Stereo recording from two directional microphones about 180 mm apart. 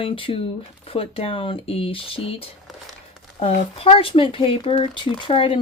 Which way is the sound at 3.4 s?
30° left (ahead or behind).